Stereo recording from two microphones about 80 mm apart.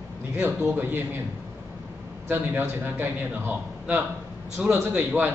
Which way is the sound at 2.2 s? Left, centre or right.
Right.